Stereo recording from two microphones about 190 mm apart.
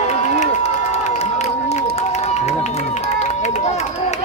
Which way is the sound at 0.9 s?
35° left (ahead or behind).